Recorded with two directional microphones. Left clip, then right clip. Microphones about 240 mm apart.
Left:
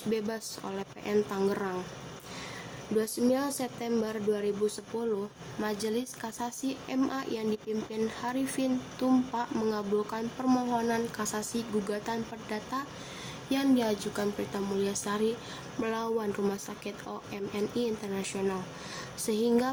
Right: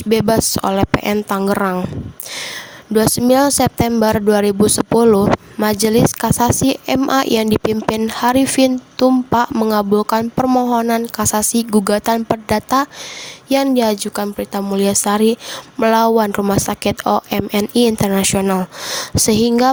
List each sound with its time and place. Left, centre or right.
0.1 s speech: right
2.9 s speech: right